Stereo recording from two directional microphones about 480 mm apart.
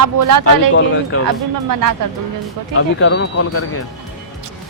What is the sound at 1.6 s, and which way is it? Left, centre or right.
Speech, right.